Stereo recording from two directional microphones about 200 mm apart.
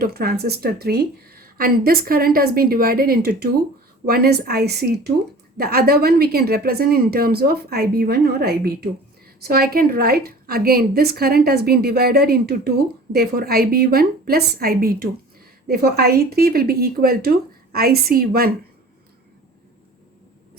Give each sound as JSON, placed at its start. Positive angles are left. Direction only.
{"t": 0.0, "sound": "a woman's voice", "side_deg": -50}